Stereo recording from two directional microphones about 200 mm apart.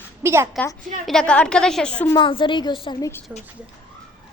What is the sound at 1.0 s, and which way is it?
A woman's voice, 5° left (ahead or behind).